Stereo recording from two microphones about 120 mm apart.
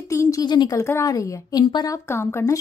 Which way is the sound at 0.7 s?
25° left (ahead or behind).